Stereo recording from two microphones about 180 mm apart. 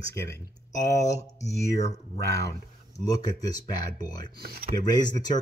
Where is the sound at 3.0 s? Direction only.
20° left (ahead or behind).